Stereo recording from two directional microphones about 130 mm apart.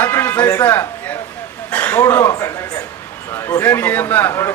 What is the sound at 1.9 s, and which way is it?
A man's voice, 20° left (ahead or behind).